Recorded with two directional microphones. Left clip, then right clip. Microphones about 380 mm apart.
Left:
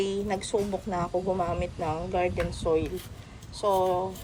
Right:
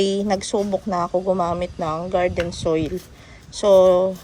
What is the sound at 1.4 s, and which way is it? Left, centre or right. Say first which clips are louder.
Speech: right 7 dB; right.